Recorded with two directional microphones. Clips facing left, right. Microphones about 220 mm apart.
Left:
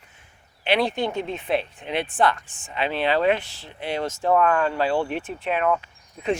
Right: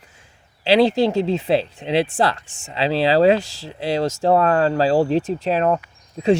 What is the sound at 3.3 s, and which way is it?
Speech, 90° right.